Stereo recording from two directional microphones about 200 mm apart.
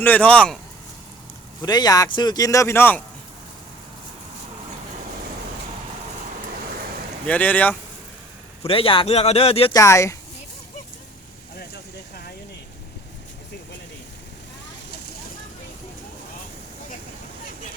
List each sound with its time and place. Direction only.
0.0 s speech: 5° left (ahead or behind)
1.6 s speech: 20° left (ahead or behind)
7.3 s speech: 5° left (ahead or behind)
8.6 s speech: 25° left (ahead or behind)
9.7 s speech: 15° left (ahead or behind)
11.5 s a sound: 50° left (ahead or behind)